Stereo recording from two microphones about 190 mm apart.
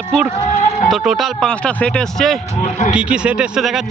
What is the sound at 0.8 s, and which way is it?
A man's voice, centre (ahead or behind).